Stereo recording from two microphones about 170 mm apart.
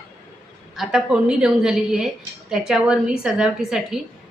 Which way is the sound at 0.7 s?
5° right (ahead or behind).